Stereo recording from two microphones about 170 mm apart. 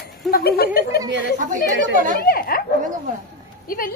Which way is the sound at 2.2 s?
60° left (ahead or behind).